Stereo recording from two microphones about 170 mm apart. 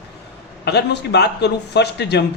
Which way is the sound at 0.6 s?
75° left (ahead or behind).